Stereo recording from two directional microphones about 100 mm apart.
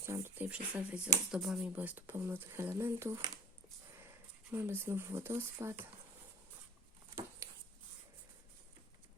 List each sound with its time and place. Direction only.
0.0 s speech: 25° right (ahead or behind)
0.5 s speech: 10° right (ahead or behind)
1.7 s speech: 15° right (ahead or behind)
4.5 s speech: 25° right (ahead or behind)
7.4 s a sound: 30° right (ahead or behind)